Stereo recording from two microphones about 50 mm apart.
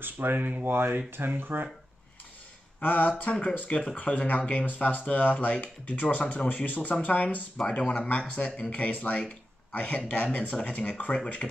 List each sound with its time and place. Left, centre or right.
0.0 s speech: right
0.7 s speech: right
2.8 s speech: left
3.1 s speech: left